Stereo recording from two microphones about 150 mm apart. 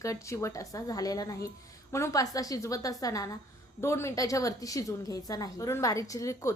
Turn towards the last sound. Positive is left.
turn(degrees=20)  # may be behind; listen again after turning